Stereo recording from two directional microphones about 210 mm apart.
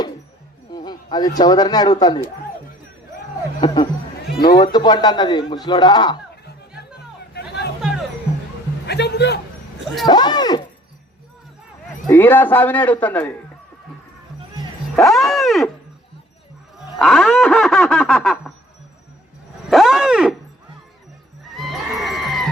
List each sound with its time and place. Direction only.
0.7 s a sound: 20° left (ahead or behind)
1.4 s speech: 20° left (ahead or behind)
4.5 s speech: 20° left (ahead or behind)
7.3 s hubbub: 50° left (ahead or behind)
7.8 s music: centre (ahead or behind)
8.9 s a man's voice: 50° left (ahead or behind)
10.1 s speech: 20° left (ahead or behind)
12.0 s a man's voice: 10° left (ahead or behind)
15.0 s wild animals: centre (ahead or behind)
17.0 s a sound: centre (ahead or behind)
19.7 s a sound: centre (ahead or behind)
21.5 s a sound: centre (ahead or behind)